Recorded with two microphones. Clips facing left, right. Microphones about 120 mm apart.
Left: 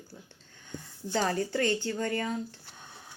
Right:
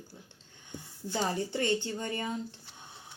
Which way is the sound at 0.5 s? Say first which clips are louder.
Left 3 dB; 20° right (ahead or behind).